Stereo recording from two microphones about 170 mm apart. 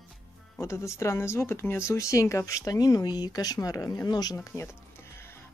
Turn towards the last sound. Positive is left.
turn(degrees=15)  # may be behind; listen again after turning